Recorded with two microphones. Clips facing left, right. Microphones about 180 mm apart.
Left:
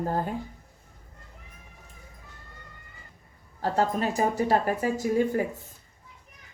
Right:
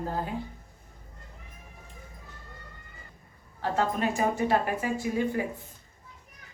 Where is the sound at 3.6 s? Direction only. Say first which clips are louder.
Left 2 dB; 40° left (ahead or behind).